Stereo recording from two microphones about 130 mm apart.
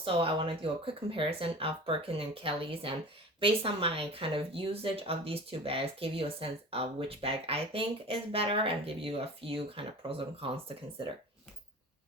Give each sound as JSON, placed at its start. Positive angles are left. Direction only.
{"t": 0.0, "sound": "speech", "side_deg": -45}